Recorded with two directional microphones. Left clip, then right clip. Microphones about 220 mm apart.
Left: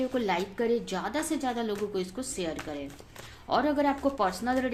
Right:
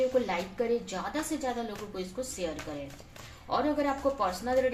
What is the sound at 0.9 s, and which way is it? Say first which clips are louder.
Speech: left 3 dB; 50° left (ahead or behind).